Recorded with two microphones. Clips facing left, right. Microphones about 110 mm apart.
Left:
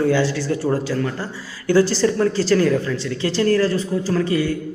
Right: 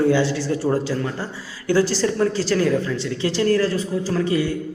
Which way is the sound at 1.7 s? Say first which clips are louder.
Left 3 dB; 5° right (ahead or behind).